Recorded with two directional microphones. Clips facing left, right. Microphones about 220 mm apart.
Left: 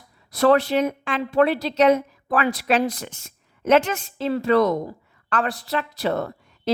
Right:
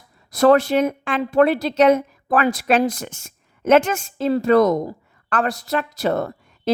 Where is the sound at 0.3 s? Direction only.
45° right (ahead or behind).